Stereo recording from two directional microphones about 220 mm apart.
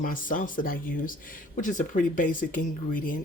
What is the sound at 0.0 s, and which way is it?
Speech, 40° left (ahead or behind).